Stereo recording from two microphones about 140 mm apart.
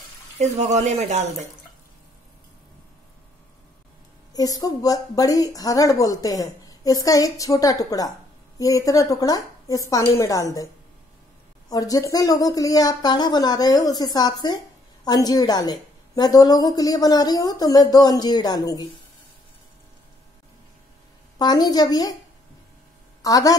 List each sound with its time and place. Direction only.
0.4 s speech: 55° right (ahead or behind)
4.3 s a woman's voice: 25° left (ahead or behind)
11.7 s a woman's voice: 25° left (ahead or behind)
21.4 s a woman's voice: 30° left (ahead or behind)
23.2 s a woman's voice: 25° left (ahead or behind)